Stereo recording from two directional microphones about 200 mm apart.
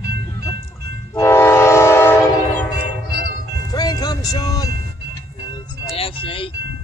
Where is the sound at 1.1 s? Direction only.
15° left (ahead or behind).